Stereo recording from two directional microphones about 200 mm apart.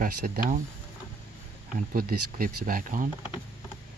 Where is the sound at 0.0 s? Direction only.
45° right (ahead or behind).